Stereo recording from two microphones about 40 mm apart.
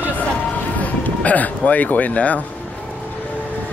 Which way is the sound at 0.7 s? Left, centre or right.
Left.